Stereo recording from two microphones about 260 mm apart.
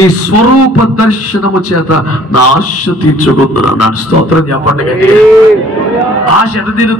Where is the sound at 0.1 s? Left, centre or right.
Left.